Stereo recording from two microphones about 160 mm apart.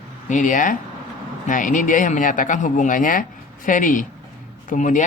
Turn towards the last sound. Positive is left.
turn(degrees=50)  # may be behind; listen again after turning